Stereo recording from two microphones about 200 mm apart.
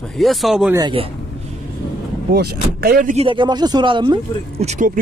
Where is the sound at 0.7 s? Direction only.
20° right (ahead or behind).